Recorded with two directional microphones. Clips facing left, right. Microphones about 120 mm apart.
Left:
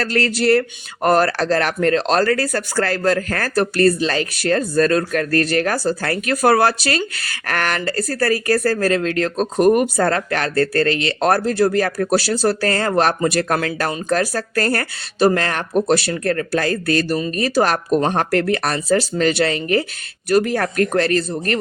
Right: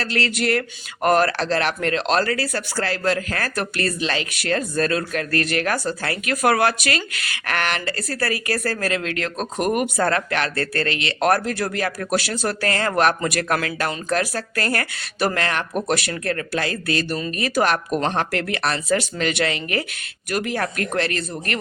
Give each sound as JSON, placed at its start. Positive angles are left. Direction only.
{"t": 0.0, "sound": "speech", "side_deg": 45}